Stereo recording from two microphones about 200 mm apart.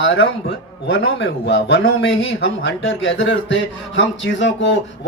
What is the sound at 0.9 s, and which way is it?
Speech, 55° left (ahead or behind).